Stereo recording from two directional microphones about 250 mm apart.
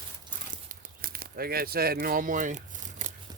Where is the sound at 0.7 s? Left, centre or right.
Right.